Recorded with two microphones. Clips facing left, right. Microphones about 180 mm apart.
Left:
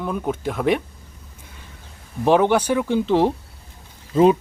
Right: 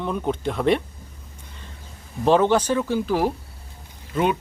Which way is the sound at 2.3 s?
15° left (ahead or behind).